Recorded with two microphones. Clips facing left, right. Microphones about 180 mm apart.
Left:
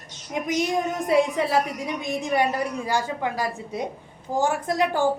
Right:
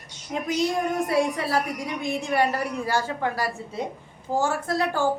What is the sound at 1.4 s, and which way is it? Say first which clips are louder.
A child's voice: left 3 dB; 20° left (ahead or behind).